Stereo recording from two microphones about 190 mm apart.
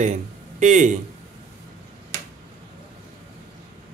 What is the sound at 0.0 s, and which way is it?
Speech, 40° right (ahead or behind).